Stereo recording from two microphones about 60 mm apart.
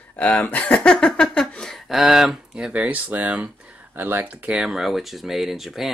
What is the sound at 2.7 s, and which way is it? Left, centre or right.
Speech, right.